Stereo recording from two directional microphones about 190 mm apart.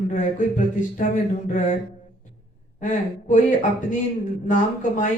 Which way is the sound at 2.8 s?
45° left (ahead or behind).